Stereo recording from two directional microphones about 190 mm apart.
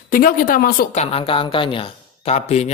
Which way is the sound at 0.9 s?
30° left (ahead or behind).